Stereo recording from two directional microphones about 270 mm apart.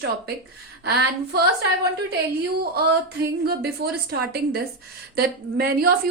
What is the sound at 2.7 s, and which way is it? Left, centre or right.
A woman's voice, right.